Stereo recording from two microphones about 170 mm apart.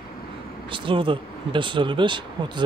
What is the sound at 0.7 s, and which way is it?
Speech, 30° right (ahead or behind).